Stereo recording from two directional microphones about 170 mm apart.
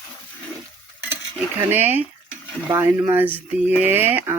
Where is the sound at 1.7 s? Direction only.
10° right (ahead or behind).